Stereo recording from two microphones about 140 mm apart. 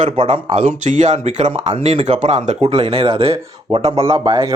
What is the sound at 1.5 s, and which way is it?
Speech, 40° right (ahead or behind).